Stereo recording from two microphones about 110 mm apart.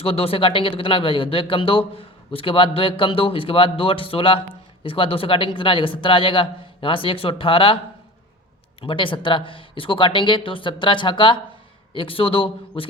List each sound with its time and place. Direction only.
0.0 s a man's voice: 60° left (ahead or behind)
8.8 s a man's voice: 50° left (ahead or behind)